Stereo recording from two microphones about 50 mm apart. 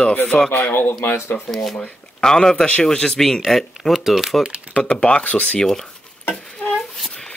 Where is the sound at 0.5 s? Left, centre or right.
Left.